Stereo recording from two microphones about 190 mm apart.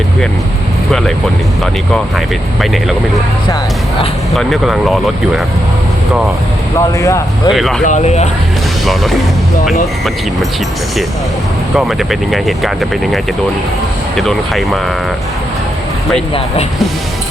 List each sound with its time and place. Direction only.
0.9 s speech: centre (ahead or behind)
4.4 s speech: centre (ahead or behind)
6.7 s speech: 15° left (ahead or behind)
7.5 s speech: centre (ahead or behind)
7.9 s speech: 40° left (ahead or behind)
8.8 s speech: centre (ahead or behind)
11.8 s speech: centre (ahead or behind)
14.2 s speech: centre (ahead or behind)